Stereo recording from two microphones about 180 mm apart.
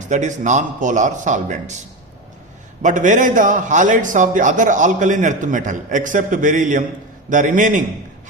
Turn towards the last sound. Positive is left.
turn(degrees=-45)  # may be behind; listen again after turning